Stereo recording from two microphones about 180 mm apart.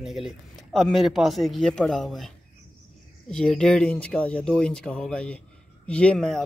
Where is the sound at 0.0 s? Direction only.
Centre (ahead or behind).